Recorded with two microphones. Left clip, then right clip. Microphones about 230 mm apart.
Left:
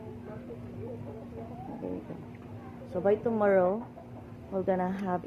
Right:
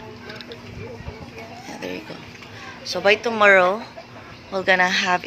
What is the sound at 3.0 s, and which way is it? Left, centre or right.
A woman's voice, centre.